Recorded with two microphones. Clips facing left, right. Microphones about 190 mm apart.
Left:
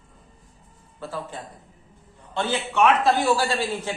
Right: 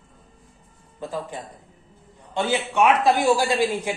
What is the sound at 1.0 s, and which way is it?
A man's voice, 15° right (ahead or behind).